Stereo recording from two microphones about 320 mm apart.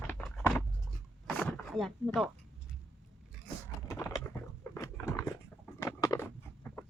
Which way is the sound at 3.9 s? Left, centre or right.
Centre.